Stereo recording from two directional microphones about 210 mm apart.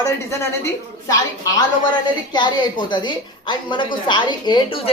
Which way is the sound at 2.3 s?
20° left (ahead or behind).